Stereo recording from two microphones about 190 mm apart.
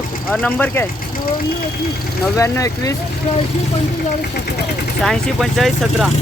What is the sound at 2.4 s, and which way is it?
Speech, 15° left (ahead or behind).